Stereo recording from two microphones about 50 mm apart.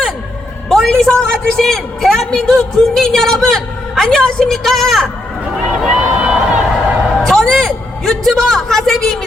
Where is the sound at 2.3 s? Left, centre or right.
Centre.